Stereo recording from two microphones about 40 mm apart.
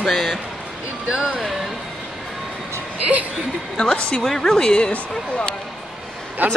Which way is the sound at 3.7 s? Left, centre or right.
Left.